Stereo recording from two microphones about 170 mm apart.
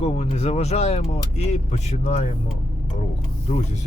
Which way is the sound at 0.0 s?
40° left (ahead or behind).